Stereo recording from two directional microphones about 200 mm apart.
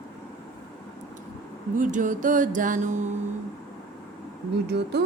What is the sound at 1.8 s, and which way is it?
Music, 40° right (ahead or behind).